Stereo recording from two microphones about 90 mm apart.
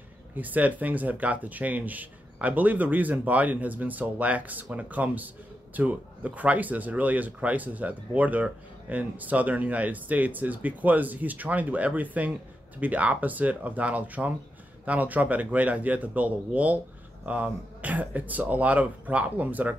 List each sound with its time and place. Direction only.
0.4 s speech: 15° right (ahead or behind)